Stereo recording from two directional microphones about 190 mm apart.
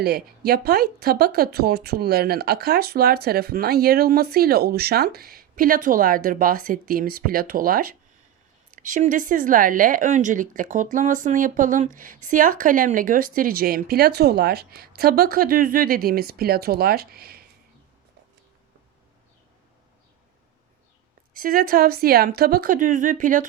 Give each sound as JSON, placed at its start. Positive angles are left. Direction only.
{"t": 0.0, "sound": "a woman's voice", "side_deg": -55}
{"t": 21.3, "sound": "a woman's voice", "side_deg": -50}